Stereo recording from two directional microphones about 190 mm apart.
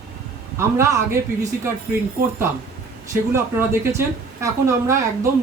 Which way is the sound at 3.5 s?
15° right (ahead or behind).